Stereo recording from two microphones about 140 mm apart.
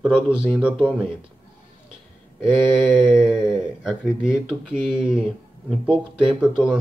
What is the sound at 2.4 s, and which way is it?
Speech, 5° right (ahead or behind).